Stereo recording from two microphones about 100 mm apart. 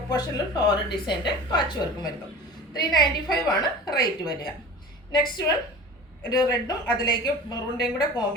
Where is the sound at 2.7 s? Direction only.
45° left (ahead or behind).